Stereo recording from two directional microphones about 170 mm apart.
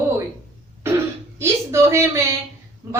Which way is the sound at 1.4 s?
15° right (ahead or behind).